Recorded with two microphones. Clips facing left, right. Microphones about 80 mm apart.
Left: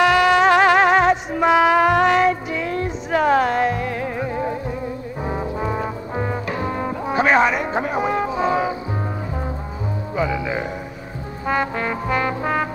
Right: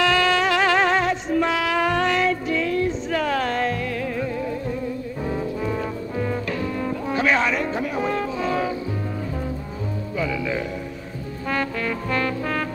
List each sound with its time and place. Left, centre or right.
0.0 s music: centre
5.2 s brass instrument: left
7.2 s chatter: left
8.0 s music: centre
10.1 s music: left
11.4 s brass instrument: left